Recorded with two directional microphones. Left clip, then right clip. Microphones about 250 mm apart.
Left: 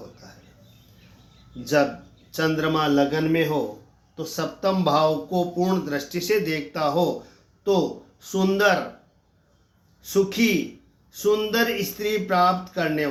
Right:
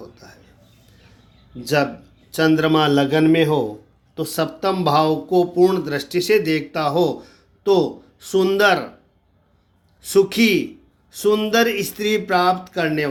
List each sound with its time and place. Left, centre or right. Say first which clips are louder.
1.6 s speech: right 2 dB; right
8.2 s speech: right 5 dB; right
10.0 s speech: right 6 dB; right